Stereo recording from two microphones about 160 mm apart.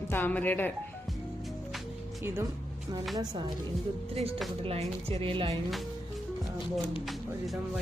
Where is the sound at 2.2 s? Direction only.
15° right (ahead or behind).